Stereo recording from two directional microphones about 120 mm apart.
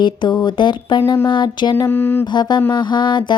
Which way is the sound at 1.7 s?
20° left (ahead or behind).